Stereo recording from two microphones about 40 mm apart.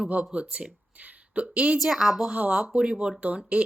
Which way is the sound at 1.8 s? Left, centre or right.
Centre.